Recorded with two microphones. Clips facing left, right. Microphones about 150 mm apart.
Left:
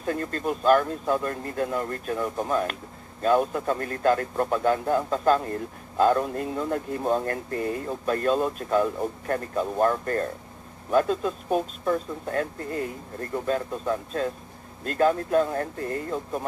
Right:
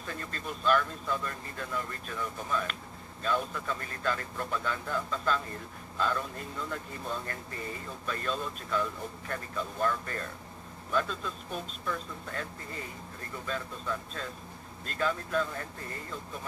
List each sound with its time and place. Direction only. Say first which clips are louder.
0.0 s speech: left 12 dB; 50° left (ahead or behind)